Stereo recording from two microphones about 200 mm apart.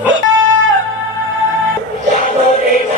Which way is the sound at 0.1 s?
75° right (ahead or behind).